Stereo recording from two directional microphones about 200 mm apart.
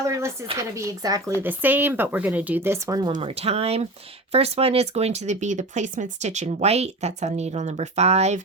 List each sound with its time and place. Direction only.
0.7 s speech: 15° right (ahead or behind); by 8.4 s 30° right (ahead or behind)